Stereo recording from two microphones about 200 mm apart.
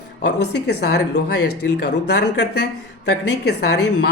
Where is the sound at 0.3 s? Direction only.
55° left (ahead or behind).